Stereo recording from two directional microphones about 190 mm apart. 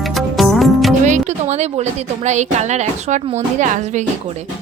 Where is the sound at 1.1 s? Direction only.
35° right (ahead or behind).